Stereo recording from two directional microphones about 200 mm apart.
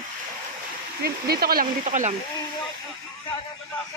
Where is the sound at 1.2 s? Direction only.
50° right (ahead or behind).